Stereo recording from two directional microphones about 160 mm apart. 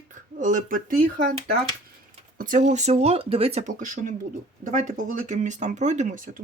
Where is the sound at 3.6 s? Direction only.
55° right (ahead or behind).